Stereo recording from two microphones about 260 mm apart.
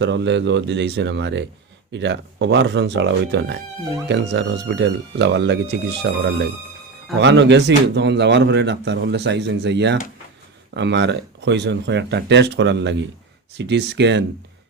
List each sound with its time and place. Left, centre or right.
0.0 s a man's voice: right